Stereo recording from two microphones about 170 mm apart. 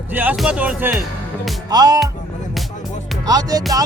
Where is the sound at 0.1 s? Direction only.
10° right (ahead or behind).